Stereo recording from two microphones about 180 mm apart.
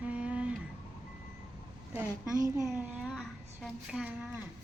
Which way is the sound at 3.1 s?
5° left (ahead or behind).